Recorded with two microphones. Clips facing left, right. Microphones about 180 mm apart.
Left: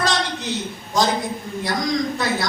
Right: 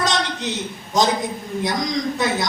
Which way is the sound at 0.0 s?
20° right (ahead or behind).